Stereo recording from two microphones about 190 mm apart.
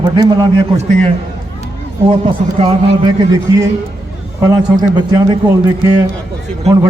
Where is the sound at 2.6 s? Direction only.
35° right (ahead or behind).